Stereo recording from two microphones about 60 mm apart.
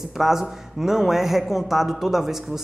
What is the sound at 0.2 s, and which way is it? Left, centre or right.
Speech, centre.